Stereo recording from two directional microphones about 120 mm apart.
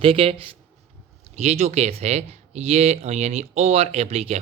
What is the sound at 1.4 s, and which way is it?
Speech, 65° right (ahead or behind).